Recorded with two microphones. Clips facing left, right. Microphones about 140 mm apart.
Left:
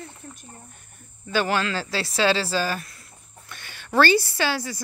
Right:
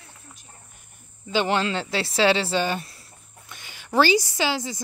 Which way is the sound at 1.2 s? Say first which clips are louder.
Right 1 dB; 20° right (ahead or behind).